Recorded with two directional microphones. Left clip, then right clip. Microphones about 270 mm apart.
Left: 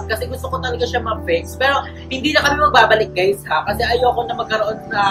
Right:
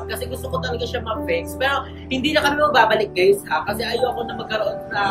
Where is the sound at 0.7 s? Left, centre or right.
Centre.